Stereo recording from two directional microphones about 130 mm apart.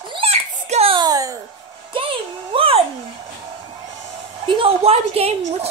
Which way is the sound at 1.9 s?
45° right (ahead or behind).